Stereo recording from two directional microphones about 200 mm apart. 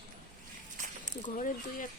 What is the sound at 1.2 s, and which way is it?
Speech, 40° left (ahead or behind).